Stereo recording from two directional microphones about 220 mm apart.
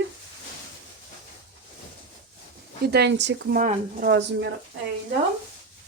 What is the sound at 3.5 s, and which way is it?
Speech, 40° right (ahead or behind).